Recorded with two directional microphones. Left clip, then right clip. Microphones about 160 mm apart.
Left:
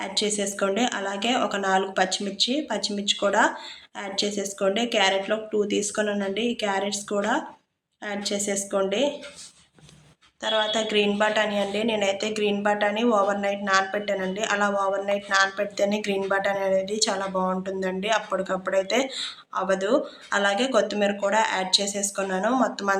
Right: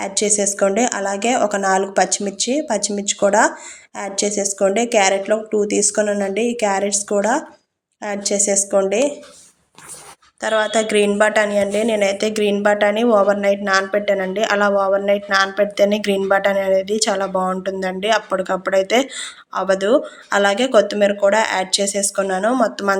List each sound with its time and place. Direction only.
0.0 s a woman's voice: 40° right (ahead or behind)
10.4 s a woman's voice: 35° right (ahead or behind)